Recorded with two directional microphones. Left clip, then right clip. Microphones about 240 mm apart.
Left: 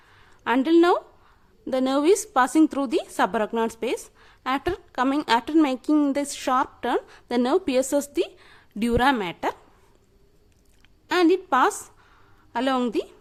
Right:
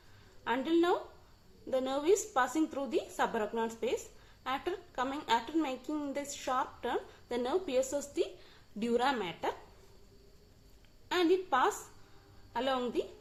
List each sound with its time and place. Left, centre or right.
0.2 s a sound: left
1.6 s a woman's voice: left
11.1 s a woman's voice: left